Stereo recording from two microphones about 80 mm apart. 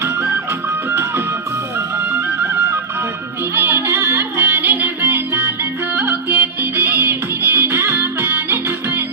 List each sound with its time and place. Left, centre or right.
0.9 s music: right
3.5 s music: right